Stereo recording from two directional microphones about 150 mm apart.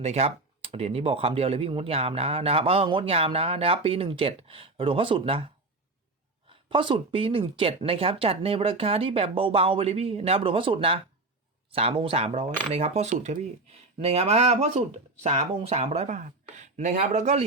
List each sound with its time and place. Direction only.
0.0 s speech: 45° right (ahead or behind)
6.5 s speech: 35° right (ahead or behind); by 17.4 s 50° right (ahead or behind)